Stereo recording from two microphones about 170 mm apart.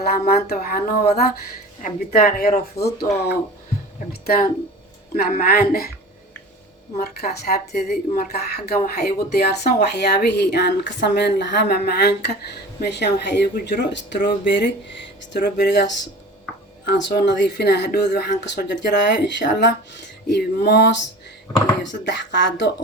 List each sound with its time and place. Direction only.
0.0 s speech: 65° left (ahead or behind)
2.8 s a woman's voice: 65° left (ahead or behind)
7.0 s a woman's voice: 70° left (ahead or behind); by 19.7 s 90° left
20.2 s a woman's voice: 80° left
21.8 s speech: 90° left